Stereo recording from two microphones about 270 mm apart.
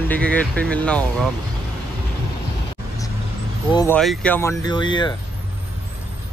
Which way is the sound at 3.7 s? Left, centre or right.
Centre.